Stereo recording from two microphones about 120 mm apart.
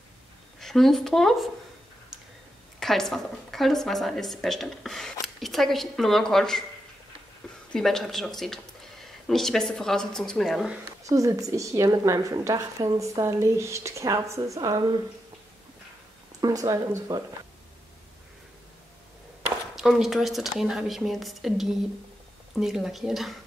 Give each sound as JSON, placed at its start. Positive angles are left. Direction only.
{"t": 0.6, "sound": "speech", "side_deg": 0}
{"t": 2.8, "sound": "a woman's voice", "side_deg": 0}
{"t": 7.7, "sound": "a woman's voice", "side_deg": 5}
{"t": 11.1, "sound": "a woman's voice", "side_deg": -30}
{"t": 16.3, "sound": "a woman's voice", "side_deg": -30}
{"t": 19.7, "sound": "a woman's voice", "side_deg": 0}